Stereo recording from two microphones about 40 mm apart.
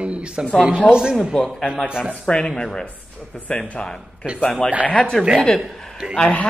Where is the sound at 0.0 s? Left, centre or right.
Right.